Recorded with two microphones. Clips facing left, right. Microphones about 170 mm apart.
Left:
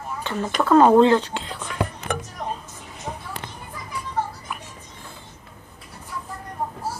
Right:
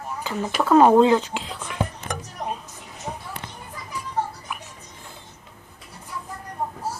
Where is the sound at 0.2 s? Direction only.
10° right (ahead or behind).